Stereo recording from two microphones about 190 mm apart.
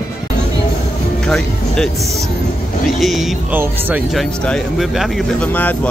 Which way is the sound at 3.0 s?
Centre (ahead or behind).